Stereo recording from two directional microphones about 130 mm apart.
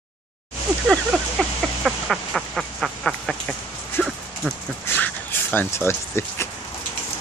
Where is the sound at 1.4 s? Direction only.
Centre (ahead or behind).